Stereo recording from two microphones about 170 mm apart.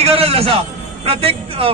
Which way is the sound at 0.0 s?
35° right (ahead or behind).